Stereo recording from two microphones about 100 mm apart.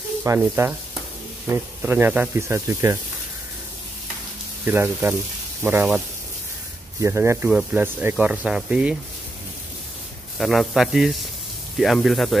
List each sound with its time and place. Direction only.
0.2 s speech: 30° right (ahead or behind)
4.6 s speech: 15° right (ahead or behind)
7.0 s speech: 25° right (ahead or behind)
7.4 s speech: 10° right (ahead or behind)
7.8 s speech: 20° right (ahead or behind)
10.3 s speech: centre (ahead or behind)